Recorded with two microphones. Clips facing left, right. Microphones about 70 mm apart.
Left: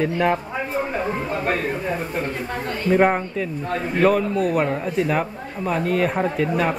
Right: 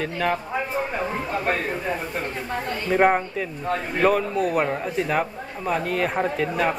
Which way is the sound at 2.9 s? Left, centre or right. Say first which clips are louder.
Left 1 dB; centre.